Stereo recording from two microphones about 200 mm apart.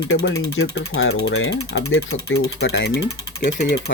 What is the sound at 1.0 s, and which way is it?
Ratchet, 90° left.